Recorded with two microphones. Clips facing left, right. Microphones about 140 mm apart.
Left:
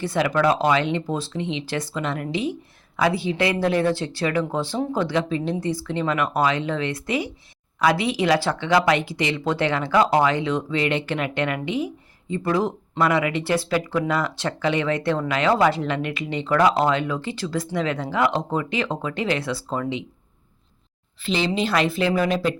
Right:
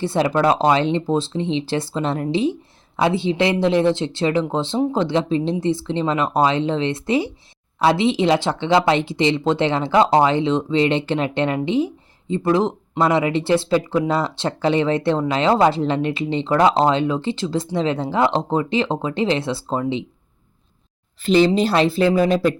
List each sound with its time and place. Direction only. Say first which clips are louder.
0.0 s speech: right 3 dB; 30° right (ahead or behind)
21.2 s speech: right 8 dB; 40° right (ahead or behind)